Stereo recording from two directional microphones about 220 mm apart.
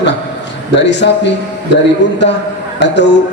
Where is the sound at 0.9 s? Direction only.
55° left (ahead or behind).